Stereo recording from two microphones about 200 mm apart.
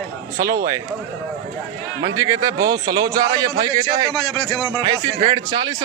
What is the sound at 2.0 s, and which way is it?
A man's voice, 20° right (ahead or behind).